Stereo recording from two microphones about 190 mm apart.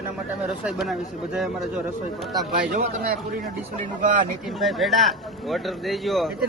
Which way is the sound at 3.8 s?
45° right (ahead or behind).